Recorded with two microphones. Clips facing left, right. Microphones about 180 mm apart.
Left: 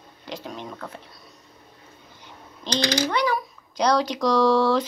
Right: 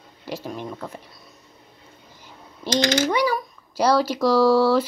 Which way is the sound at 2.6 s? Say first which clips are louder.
Right 4 dB; 10° right (ahead or behind).